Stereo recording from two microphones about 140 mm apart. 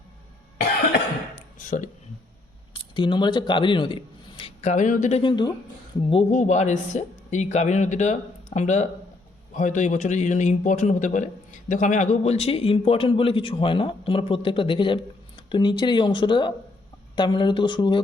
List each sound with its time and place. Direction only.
2.7 s speech: 35° left (ahead or behind)
4.6 s speech: 60° left (ahead or behind)
5.2 s a man's voice: 30° left (ahead or behind)
6.3 s a man's voice: 55° left (ahead or behind); by 18.0 s 35° left (ahead or behind)